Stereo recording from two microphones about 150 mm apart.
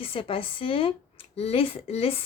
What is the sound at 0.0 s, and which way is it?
A woman's voice, 40° left (ahead or behind).